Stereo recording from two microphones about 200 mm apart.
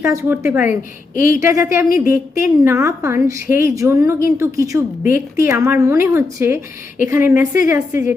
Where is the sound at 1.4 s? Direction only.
15° right (ahead or behind).